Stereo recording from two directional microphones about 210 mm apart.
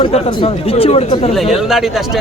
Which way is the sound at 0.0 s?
25° left (ahead or behind).